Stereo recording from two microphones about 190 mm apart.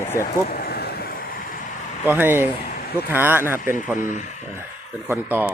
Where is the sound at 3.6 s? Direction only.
45° left (ahead or behind).